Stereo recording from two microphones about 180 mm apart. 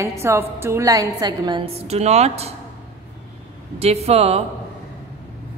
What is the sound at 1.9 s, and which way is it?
Speech, 35° right (ahead or behind).